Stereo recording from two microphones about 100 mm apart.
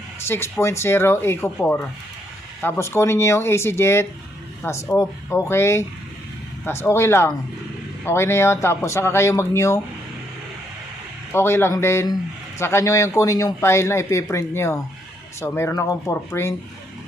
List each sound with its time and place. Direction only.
0.3 s speech: 25° left (ahead or behind)
2.6 s speech: 25° left (ahead or behind)
11.3 s speech: 25° left (ahead or behind)